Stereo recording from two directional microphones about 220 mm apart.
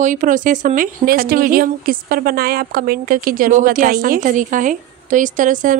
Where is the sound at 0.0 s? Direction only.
35° right (ahead or behind).